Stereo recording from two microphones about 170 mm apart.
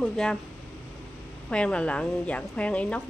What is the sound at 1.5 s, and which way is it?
A woman's voice, 5° left (ahead or behind).